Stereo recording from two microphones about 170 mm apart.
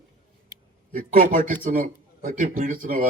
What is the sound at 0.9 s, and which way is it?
A man's voice, 55° right (ahead or behind).